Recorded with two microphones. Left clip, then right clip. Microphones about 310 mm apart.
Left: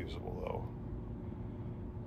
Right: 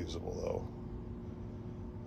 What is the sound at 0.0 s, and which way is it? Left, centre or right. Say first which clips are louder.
Speech: right 3 dB; centre.